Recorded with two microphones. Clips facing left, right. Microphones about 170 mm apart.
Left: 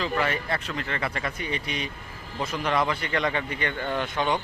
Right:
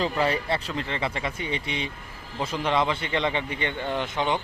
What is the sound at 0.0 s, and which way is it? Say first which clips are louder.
Speech: right 2 dB; 30° right (ahead or behind).